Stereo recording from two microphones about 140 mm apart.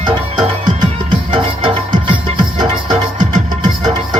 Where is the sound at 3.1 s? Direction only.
60° right (ahead or behind).